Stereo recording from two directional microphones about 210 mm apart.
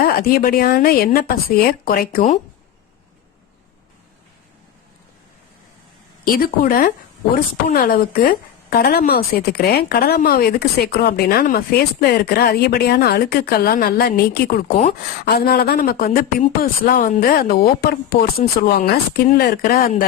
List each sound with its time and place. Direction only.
0.0 s a woman's voice: 45° left (ahead or behind)
6.2 s a woman's voice: 45° left (ahead or behind)